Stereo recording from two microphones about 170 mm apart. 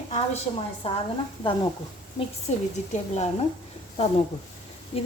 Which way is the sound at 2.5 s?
40° left (ahead or behind).